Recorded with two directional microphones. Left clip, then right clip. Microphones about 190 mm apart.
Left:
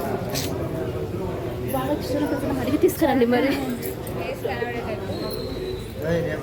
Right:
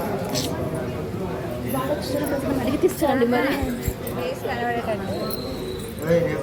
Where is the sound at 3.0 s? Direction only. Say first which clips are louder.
Left 1 dB; 30° left (ahead or behind).